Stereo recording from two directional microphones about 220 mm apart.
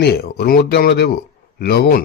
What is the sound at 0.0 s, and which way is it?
A man's voice, 45° left (ahead or behind).